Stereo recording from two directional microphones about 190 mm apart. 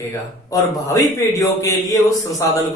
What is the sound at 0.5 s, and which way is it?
Speech, 15° left (ahead or behind).